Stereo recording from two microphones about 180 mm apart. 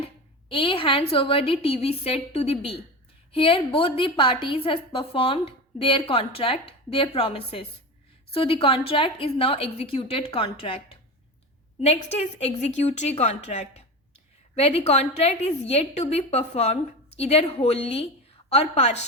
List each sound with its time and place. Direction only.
0.0 s a woman's voice: 30° left (ahead or behind)